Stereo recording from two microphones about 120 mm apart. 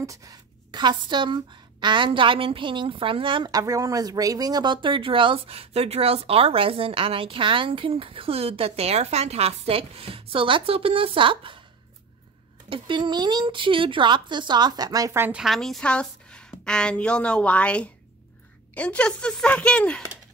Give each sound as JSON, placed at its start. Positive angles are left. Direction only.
{"t": 0.0, "sound": "speech", "side_deg": -30}
{"t": 3.5, "sound": "speech", "side_deg": -30}
{"t": 12.6, "sound": "speech", "side_deg": -45}
{"t": 15.3, "sound": "a woman's voice", "side_deg": 0}